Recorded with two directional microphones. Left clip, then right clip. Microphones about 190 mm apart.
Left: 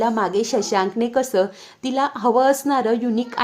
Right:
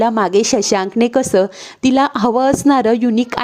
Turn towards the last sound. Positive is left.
turn(degrees=-40)  # may be behind; listen again after turning